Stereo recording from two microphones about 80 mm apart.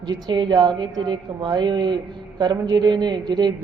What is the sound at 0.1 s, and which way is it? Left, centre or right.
A woman's voice, right.